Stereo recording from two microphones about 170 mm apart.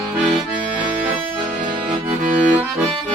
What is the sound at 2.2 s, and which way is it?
Accordion, 45° right (ahead or behind).